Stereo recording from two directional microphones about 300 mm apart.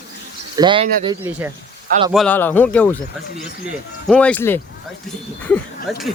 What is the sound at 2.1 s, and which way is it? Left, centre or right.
Speech, centre.